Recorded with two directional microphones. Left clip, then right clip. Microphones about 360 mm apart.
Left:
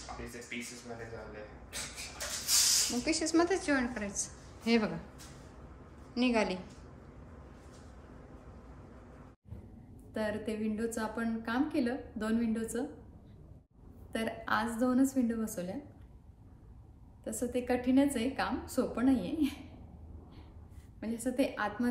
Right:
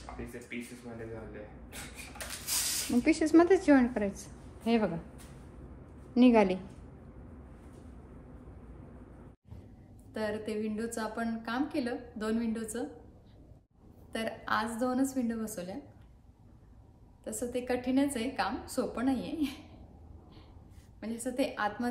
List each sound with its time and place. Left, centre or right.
0.5 s a woman's voice: centre
3.1 s a woman's voice: right; by 4.9 s centre
6.1 s a woman's voice: centre
10.1 s a woman's voice: centre
14.1 s a woman's voice: centre
17.2 s a woman's voice: centre
21.0 s a woman's voice: centre